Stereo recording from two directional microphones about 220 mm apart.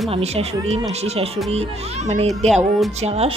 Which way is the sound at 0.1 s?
30° right (ahead or behind).